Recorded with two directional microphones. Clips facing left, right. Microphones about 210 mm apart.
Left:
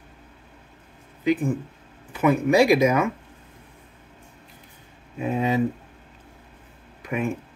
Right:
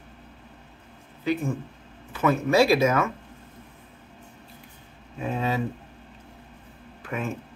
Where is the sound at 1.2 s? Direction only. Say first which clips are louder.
Left 4 dB; 15° left (ahead or behind).